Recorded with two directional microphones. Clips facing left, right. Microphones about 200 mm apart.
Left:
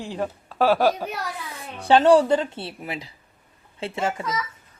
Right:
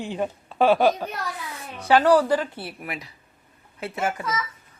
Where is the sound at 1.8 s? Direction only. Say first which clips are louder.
Left 2 dB; 25° left (ahead or behind).